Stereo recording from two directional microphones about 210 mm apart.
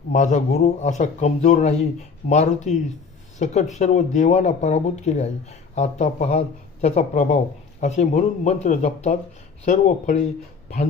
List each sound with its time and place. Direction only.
0.1 s speech: 35° left (ahead or behind)